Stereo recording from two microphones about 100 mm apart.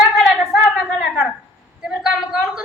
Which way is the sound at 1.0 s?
5° right (ahead or behind).